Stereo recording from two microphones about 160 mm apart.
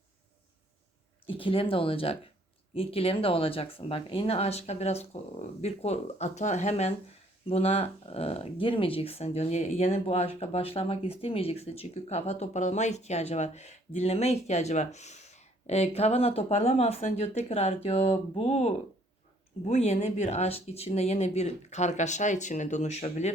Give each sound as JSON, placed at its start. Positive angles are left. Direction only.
{"t": 1.3, "sound": "speech", "side_deg": 35}